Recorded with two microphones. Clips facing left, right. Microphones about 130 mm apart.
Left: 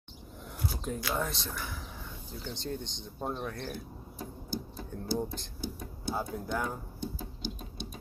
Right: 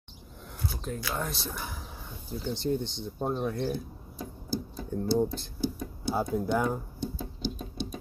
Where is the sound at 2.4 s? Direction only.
10° right (ahead or behind).